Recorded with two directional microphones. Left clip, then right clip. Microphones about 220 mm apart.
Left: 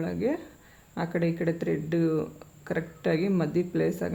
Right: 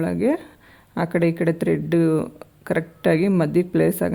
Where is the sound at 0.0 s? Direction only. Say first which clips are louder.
Right 8 dB; 50° right (ahead or behind).